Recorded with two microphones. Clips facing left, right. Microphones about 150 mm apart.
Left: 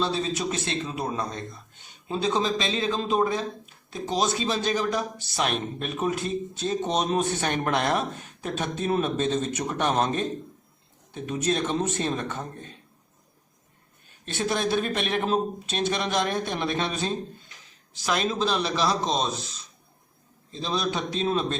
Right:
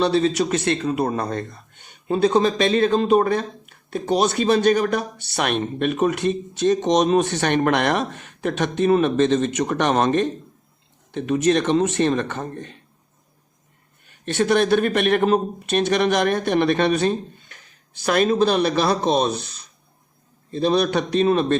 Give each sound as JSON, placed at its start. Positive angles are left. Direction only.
{"t": 0.0, "sound": "a man's voice", "side_deg": -70}
{"t": 14.1, "sound": "speech", "side_deg": -65}